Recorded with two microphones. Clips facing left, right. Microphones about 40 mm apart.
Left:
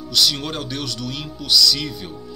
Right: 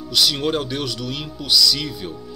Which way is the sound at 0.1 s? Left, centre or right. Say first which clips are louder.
Right 2 dB; centre.